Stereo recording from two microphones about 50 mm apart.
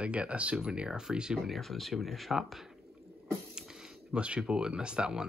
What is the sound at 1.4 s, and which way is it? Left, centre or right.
Speech, centre.